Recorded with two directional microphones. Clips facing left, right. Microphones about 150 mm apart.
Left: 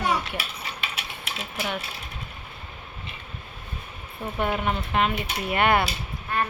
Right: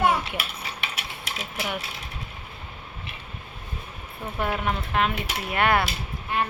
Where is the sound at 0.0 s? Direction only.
55° right (ahead or behind).